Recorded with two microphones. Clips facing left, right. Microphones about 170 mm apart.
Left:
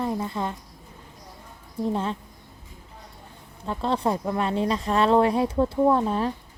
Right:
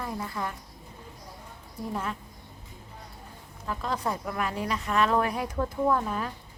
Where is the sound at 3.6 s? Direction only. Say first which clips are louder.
Left 6 dB; 30° left (ahead or behind).